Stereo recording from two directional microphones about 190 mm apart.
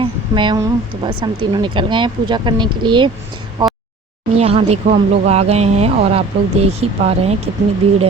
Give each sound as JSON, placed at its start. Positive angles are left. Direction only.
{"t": 0.0, "sound": "speech", "side_deg": -25}
{"t": 3.6, "sound": "a sound", "side_deg": -20}
{"t": 4.4, "sound": "speech", "side_deg": -30}